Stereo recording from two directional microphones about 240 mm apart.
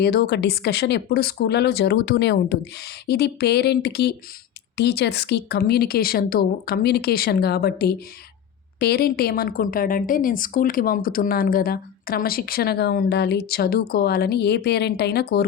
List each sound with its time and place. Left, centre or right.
0.0 s a woman's voice: left